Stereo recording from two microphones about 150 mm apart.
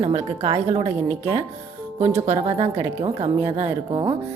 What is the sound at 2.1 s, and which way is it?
A woman's voice, 45° right (ahead or behind).